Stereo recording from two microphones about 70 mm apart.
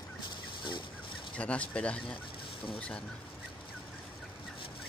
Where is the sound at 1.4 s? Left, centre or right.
Centre.